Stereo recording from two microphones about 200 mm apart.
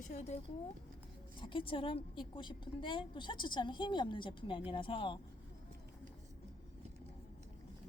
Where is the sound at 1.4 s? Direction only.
25° left (ahead or behind).